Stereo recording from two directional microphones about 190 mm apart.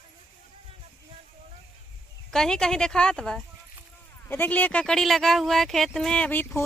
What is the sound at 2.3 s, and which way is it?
Speech, 5° left (ahead or behind).